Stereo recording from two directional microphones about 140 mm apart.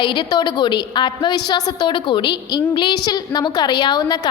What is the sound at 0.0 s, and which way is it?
A woman's voice, 35° left (ahead or behind).